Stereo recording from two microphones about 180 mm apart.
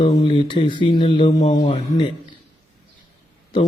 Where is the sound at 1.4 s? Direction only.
45° left (ahead or behind).